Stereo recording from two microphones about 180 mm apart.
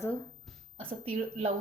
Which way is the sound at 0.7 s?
30° right (ahead or behind).